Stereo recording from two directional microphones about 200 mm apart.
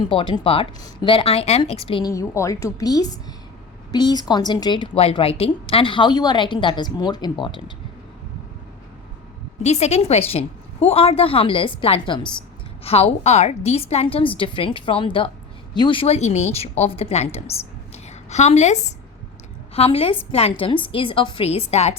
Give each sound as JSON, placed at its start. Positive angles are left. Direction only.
{"t": 0.0, "sound": "a woman's voice", "side_deg": 25}
{"t": 1.9, "sound": "a woman's voice", "side_deg": 20}
{"t": 9.6, "sound": "a woman's voice", "side_deg": 35}
{"t": 17.5, "sound": "a sound", "side_deg": 35}
{"t": 19.7, "sound": "a woman's voice", "side_deg": 30}